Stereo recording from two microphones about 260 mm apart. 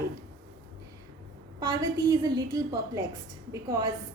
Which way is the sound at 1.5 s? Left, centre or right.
Centre.